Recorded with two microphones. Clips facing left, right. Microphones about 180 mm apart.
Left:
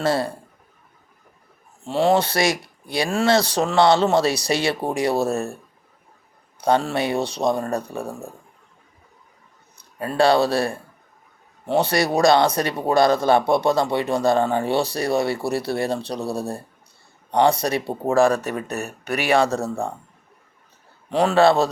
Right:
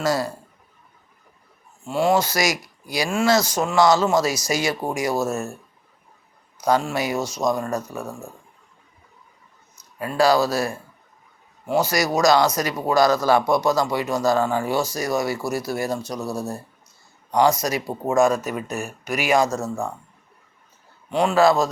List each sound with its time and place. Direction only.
0.0 s a man's voice: 30° left (ahead or behind)
1.8 s speech: 35° left (ahead or behind)
6.6 s speech: 30° left (ahead or behind)
10.0 s speech: 30° left (ahead or behind)
11.9 s a man's voice: 30° left (ahead or behind)
21.1 s speech: 35° left (ahead or behind)